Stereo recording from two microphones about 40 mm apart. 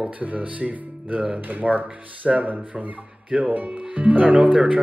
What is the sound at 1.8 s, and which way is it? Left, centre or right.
Speech, right.